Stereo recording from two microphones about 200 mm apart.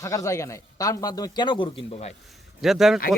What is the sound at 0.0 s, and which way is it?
Speech, 15° left (ahead or behind).